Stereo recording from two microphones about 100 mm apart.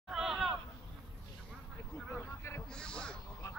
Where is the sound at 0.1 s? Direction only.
5° right (ahead or behind).